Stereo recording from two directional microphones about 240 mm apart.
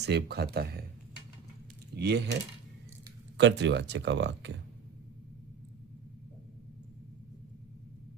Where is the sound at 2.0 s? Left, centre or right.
Right.